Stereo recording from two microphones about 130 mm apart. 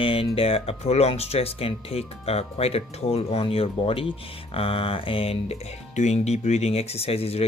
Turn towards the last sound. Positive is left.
turn(degrees=50)  # may be behind; listen again after turning